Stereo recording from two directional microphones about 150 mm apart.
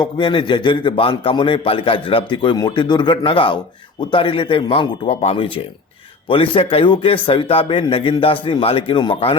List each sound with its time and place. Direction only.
0.0 s a man's voice: 30° left (ahead or behind)